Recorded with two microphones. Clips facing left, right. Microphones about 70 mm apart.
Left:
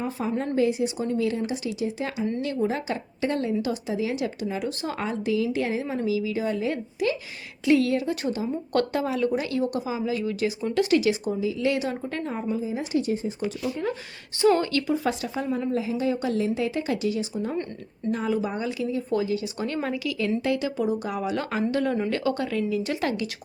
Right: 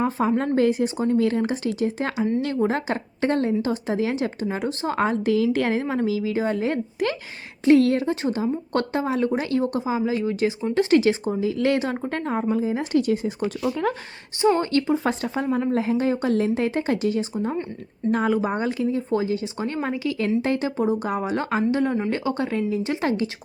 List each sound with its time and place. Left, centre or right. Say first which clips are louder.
0.0 s speech: right 6 dB; right
8.1 s speech: right 3 dB; right
11.3 s speech: right 3 dB; right
14.6 s speech: right 3 dB; right
18.1 s speech: right 4 dB; right
21.7 s speech: right 2 dB; right